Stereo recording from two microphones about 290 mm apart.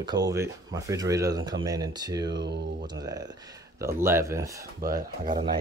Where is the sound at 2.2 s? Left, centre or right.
Right.